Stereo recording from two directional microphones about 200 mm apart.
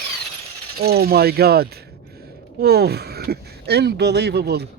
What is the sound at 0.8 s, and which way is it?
Speech, 50° right (ahead or behind).